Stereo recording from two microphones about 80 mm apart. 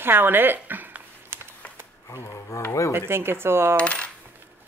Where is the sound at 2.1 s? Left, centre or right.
Left.